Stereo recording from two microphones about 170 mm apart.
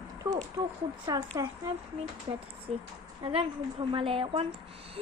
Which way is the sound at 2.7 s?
40° right (ahead or behind).